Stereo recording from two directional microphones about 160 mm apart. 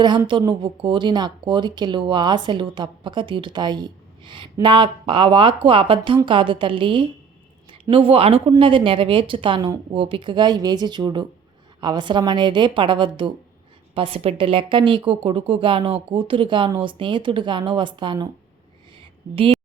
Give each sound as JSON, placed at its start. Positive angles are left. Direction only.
{"t": 0.3, "sound": "speech", "side_deg": -30}